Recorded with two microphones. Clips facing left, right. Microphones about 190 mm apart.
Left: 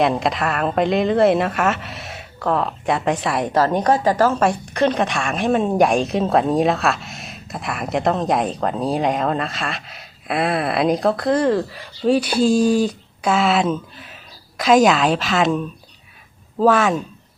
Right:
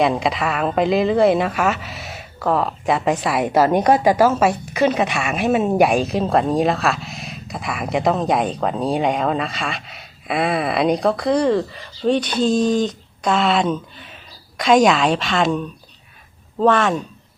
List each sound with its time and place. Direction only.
0.0 s a woman's voice: centre (ahead or behind)